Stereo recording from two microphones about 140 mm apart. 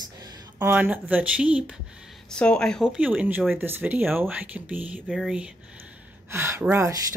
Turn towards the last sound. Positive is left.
turn(degrees=-20)  # may be behind; listen again after turning